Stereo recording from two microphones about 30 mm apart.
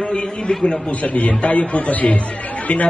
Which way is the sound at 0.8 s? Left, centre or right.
Left.